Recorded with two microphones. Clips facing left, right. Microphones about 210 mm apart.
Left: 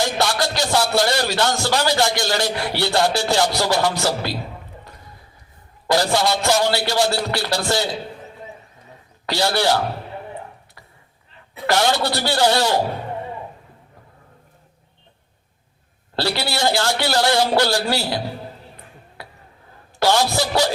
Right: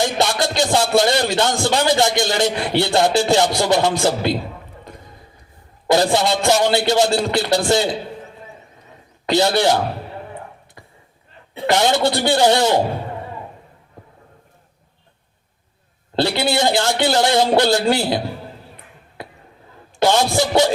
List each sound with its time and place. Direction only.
0.0 s speech: 20° right (ahead or behind)
5.9 s speech: 20° right (ahead or behind)
9.3 s speech: 20° right (ahead or behind)
11.5 s speech: 20° right (ahead or behind)
16.1 s speech: 20° right (ahead or behind)
20.0 s speech: 20° right (ahead or behind)